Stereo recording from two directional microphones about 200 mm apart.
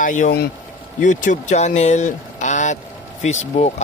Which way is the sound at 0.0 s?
40° left (ahead or behind).